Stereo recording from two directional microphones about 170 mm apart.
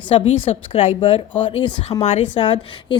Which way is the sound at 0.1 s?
35° left (ahead or behind).